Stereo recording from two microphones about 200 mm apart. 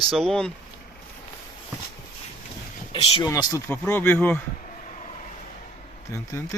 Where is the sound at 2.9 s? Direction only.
30° left (ahead or behind).